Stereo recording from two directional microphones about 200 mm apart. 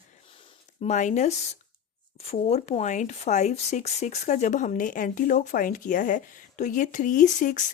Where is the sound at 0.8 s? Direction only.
35° left (ahead or behind).